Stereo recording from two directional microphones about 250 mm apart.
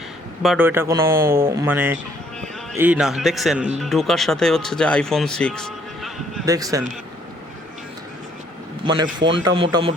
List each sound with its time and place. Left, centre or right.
0.4 s speech: centre
6.4 s speech: centre
8.8 s a man's voice: centre